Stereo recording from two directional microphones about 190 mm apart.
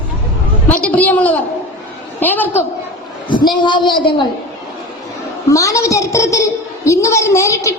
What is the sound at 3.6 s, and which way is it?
Speech, 25° left (ahead or behind).